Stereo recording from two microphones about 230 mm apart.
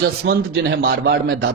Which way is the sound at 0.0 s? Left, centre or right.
Right.